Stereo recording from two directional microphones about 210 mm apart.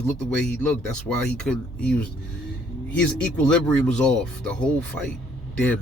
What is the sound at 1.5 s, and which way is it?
Speech, 5° left (ahead or behind).